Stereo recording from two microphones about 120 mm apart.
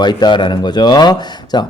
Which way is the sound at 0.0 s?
35° left (ahead or behind).